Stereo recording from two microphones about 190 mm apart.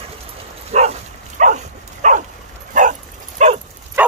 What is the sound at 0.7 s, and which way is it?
Dog, 35° right (ahead or behind).